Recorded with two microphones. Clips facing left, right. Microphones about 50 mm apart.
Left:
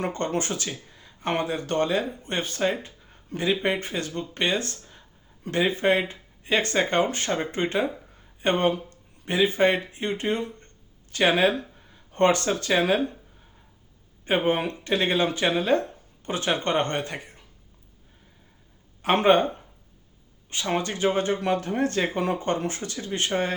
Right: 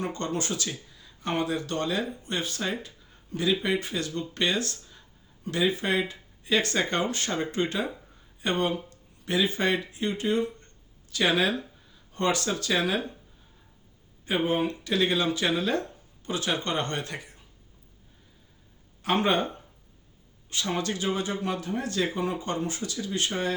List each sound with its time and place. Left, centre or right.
0.0 s speech: left
14.3 s speech: left
19.0 s speech: left
20.5 s speech: left